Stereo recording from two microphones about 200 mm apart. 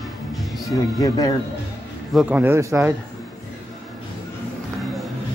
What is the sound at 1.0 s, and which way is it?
Speech, 20° left (ahead or behind).